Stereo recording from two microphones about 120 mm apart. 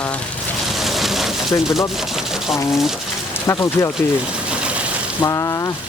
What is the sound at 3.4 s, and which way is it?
Speech, 25° left (ahead or behind).